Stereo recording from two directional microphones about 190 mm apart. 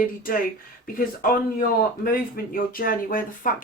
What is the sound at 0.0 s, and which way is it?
Speech, 45° left (ahead or behind).